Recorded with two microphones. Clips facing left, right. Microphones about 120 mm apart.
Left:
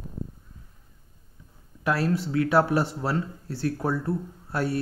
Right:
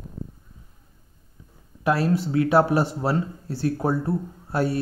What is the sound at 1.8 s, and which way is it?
Speech, 20° right (ahead or behind).